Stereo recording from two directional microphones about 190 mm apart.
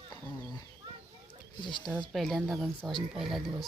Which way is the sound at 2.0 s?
Centre (ahead or behind).